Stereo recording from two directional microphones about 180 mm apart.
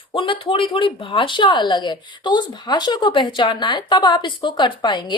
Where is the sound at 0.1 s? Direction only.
30° left (ahead or behind).